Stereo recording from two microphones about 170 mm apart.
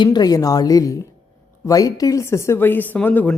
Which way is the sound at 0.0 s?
25° left (ahead or behind).